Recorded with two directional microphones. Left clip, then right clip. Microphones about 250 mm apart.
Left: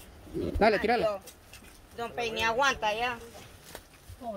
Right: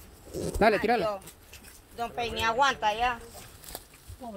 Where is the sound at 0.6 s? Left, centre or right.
Centre.